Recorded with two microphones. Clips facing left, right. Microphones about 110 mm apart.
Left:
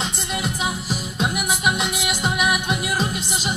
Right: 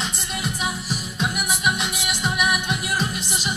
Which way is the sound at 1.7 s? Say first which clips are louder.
Left 3 dB; 30° left (ahead or behind).